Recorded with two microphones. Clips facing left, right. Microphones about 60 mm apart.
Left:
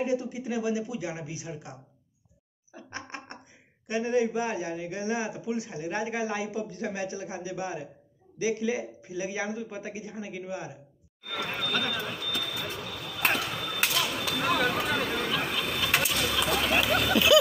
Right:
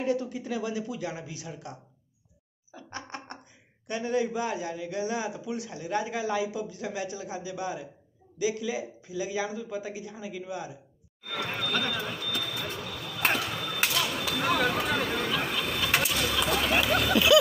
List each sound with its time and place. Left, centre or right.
0.0 s a man's voice: centre
2.7 s a sound: left
3.8 s a man's voice: left
11.2 s basketball bounce: centre